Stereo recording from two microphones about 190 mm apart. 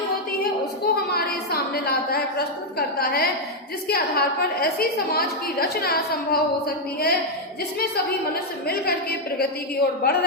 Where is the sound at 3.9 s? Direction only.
55° left (ahead or behind).